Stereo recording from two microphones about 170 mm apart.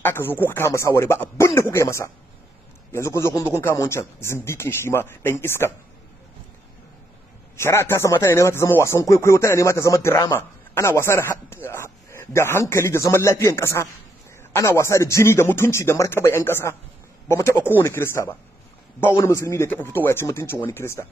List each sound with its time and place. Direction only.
0.0 s speech: 10° left (ahead or behind)
7.5 s speech: 15° left (ahead or behind)